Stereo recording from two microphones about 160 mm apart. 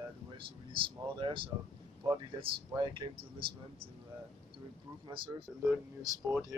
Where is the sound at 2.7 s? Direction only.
30° right (ahead or behind).